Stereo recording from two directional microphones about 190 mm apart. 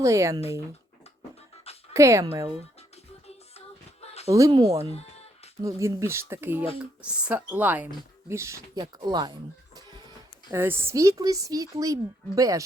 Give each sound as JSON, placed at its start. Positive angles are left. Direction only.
{"t": 0.0, "sound": "speech", "side_deg": -15}
{"t": 1.9, "sound": "speech", "side_deg": -15}
{"t": 4.0, "sound": "a sound", "side_deg": 35}
{"t": 4.3, "sound": "speech", "side_deg": -20}
{"t": 4.9, "sound": "music", "side_deg": 35}
{"t": 5.6, "sound": "speech", "side_deg": -15}
{"t": 10.5, "sound": "speech", "side_deg": -10}